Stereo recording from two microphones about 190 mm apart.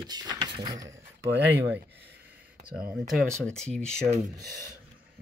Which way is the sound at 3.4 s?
5° left (ahead or behind).